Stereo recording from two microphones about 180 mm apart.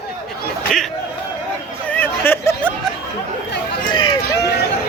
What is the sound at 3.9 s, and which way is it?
Run, 25° left (ahead or behind).